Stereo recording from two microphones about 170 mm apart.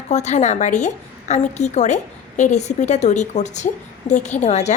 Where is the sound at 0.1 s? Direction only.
40° left (ahead or behind).